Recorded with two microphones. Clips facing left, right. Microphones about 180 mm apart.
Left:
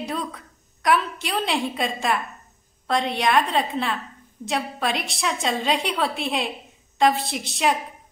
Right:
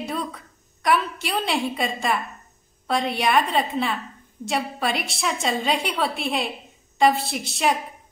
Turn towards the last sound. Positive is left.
turn(degrees=0)  # may be behind; listen again after turning